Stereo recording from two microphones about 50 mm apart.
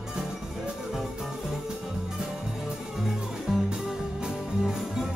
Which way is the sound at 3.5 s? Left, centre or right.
Centre.